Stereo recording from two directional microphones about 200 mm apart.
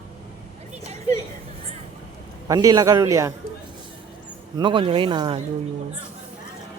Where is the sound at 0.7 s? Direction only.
35° right (ahead or behind).